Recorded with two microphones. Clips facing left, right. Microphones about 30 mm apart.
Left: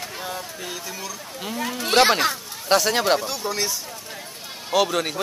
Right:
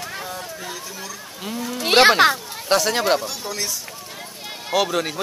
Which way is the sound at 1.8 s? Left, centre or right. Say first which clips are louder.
Right 3 dB; right.